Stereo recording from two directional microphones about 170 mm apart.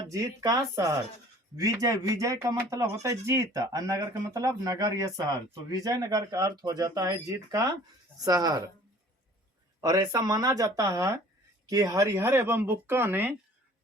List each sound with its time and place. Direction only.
0.1 s speech: 20° right (ahead or behind)
9.8 s speech: 20° right (ahead or behind)